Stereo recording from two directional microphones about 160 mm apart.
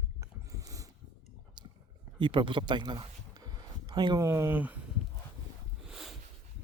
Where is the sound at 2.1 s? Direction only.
30° right (ahead or behind).